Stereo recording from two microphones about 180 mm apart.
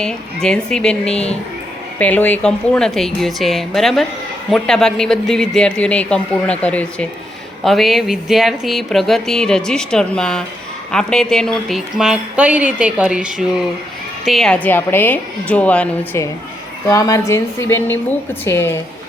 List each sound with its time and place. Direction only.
0.0 s a woman's voice: 5° left (ahead or behind)
16.9 s a woman's voice: 20° left (ahead or behind)